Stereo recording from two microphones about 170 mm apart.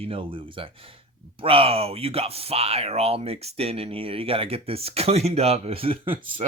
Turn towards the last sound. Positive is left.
turn(degrees=-35)  # may be behind; listen again after turning